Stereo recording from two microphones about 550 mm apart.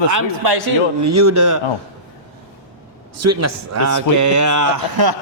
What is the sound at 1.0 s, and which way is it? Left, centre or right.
Speech, right.